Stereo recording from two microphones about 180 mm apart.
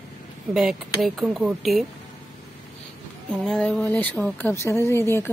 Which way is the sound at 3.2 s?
5° left (ahead or behind).